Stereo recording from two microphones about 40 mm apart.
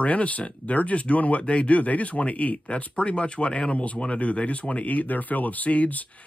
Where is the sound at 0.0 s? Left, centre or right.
Left.